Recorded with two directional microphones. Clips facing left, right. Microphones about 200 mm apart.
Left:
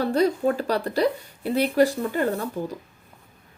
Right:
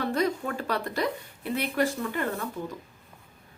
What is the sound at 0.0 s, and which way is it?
Speech, 35° left (ahead or behind).